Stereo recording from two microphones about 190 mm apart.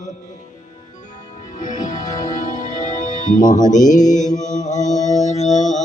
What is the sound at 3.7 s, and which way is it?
Mantra, 40° left (ahead or behind).